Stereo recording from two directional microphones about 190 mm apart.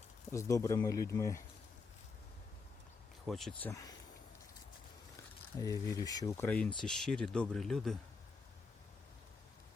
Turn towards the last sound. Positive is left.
turn(degrees=0)  # may be behind; listen again after turning